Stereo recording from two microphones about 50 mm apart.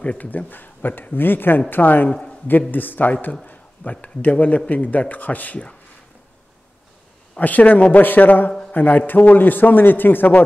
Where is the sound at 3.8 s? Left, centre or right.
Left.